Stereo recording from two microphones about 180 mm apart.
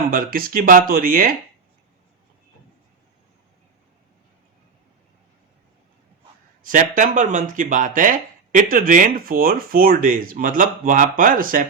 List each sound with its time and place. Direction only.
0.1 s speech: 55° right (ahead or behind)
6.6 s speech: 45° right (ahead or behind)